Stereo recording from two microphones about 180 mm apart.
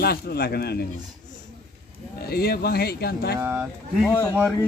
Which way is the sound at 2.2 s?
60° left (ahead or behind).